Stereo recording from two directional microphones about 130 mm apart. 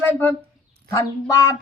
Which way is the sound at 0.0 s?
15° left (ahead or behind).